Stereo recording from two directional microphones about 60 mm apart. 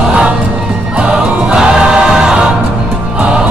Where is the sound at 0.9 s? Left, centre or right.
Centre.